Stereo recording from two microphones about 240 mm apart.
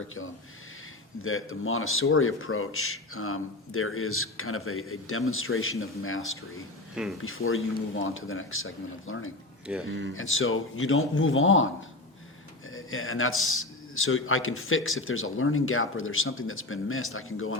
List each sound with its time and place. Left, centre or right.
1.2 s a man's voice: left
6.9 s speech: centre
7.2 s a man's voice: left
9.7 s speech: centre
10.2 s a man's voice: left